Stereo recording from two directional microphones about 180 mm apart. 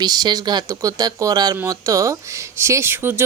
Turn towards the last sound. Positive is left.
turn(degrees=-10)  # may be behind; listen again after turning